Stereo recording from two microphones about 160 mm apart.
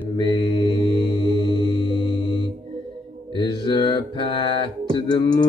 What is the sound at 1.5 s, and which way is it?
Music, 30° left (ahead or behind).